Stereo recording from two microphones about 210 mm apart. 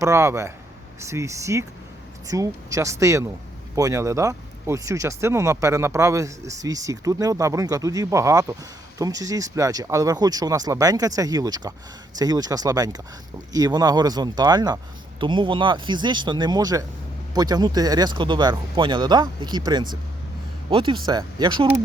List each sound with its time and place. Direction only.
0.0 s speech: 15° right (ahead or behind)